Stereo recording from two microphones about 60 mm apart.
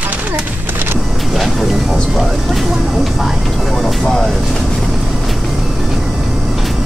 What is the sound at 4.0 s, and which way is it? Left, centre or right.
Speech, centre.